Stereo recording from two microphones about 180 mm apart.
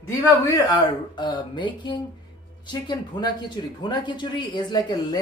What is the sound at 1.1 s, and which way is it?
Speech, 25° left (ahead or behind).